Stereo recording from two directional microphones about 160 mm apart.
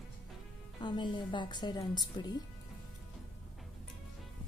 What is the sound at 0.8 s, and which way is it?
Speech, 30° left (ahead or behind).